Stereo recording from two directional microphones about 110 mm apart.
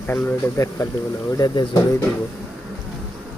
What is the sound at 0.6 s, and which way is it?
Speech, 30° left (ahead or behind).